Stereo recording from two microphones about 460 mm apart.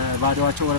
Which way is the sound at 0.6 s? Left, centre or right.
Right.